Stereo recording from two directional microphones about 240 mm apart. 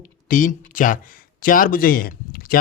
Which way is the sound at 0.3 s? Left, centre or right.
Left.